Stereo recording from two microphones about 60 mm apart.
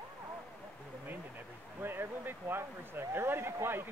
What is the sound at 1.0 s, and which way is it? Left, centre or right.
Speech, right.